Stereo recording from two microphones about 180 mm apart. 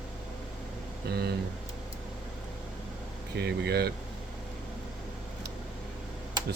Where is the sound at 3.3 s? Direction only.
65° right (ahead or behind).